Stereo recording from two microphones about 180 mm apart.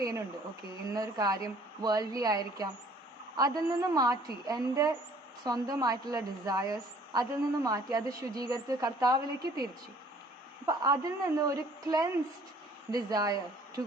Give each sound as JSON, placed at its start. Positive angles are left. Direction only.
{"t": 0.9, "sound": "a woman's voice", "side_deg": -20}
{"t": 10.7, "sound": "a woman's voice", "side_deg": -20}